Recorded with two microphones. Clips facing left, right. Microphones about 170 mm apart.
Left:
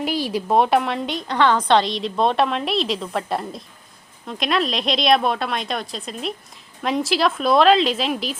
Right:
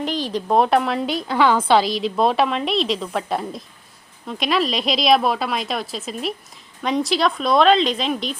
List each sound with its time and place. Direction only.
0.0 s a woman's voice: 10° left (ahead or behind)